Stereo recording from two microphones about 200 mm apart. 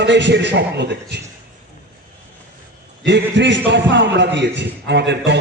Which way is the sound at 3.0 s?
60° right (ahead or behind).